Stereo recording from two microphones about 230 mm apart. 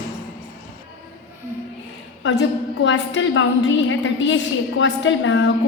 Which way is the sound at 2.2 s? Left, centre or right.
Left.